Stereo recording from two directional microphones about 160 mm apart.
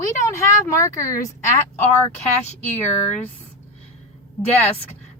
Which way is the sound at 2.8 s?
45° left (ahead or behind).